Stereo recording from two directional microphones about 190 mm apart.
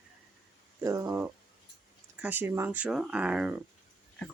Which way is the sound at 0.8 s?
15° right (ahead or behind).